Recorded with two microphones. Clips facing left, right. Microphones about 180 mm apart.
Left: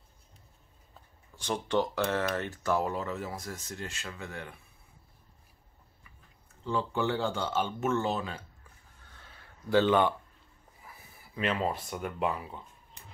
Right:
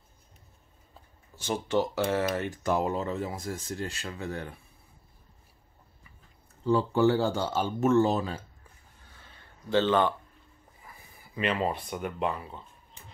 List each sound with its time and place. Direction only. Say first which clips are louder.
1.3 s speech: right 2 dB; 5° right (ahead or behind); by 4.5 s 35° right (ahead or behind)
6.6 s speech: right 7 dB; 35° right (ahead or behind)
9.8 s speech: even; 10° left (ahead or behind)